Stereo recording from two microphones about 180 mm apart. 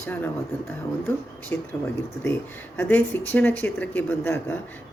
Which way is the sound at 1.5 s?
10° left (ahead or behind).